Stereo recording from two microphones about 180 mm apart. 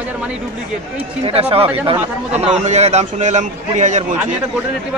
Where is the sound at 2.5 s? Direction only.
40° right (ahead or behind).